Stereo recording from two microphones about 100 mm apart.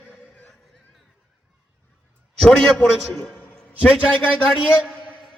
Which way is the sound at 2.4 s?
Centre (ahead or behind).